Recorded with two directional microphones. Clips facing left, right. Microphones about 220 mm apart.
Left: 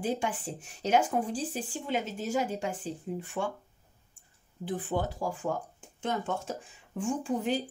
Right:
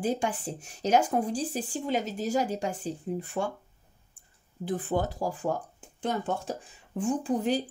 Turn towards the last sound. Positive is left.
turn(degrees=-40)  # may be behind; listen again after turning